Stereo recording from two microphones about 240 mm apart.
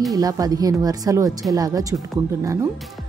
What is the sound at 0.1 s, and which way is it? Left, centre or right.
Speech, centre.